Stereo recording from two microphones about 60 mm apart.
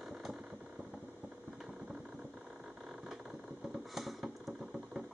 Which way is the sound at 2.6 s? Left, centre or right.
Centre.